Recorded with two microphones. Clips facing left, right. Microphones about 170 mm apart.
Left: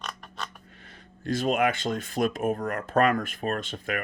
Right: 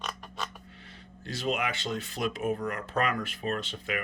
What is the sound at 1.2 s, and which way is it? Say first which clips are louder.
Speech: left 7 dB; 50° left (ahead or behind).